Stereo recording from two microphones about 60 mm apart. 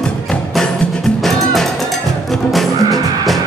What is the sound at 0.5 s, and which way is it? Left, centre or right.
Music, centre.